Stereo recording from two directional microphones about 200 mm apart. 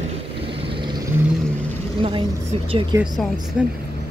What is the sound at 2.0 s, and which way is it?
A woman's voice, 25° right (ahead or behind).